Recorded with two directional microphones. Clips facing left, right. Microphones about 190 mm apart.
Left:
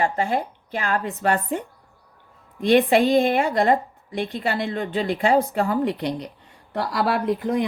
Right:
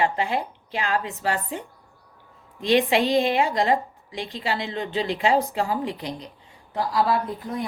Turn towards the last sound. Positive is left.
turn(degrees=90)